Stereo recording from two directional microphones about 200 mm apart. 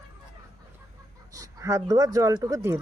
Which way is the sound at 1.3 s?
15° right (ahead or behind).